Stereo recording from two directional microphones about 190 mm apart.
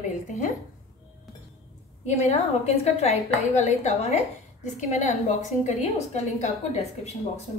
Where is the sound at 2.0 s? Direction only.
35° left (ahead or behind).